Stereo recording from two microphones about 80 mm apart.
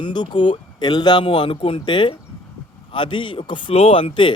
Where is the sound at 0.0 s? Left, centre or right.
Left.